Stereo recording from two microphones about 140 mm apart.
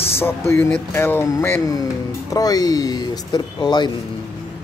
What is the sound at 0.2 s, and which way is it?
Speech, 15° left (ahead or behind).